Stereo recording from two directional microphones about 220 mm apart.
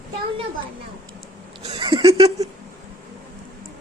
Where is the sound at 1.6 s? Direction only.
25° right (ahead or behind).